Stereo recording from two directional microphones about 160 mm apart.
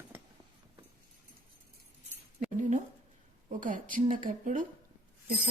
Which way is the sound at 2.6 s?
50° right (ahead or behind).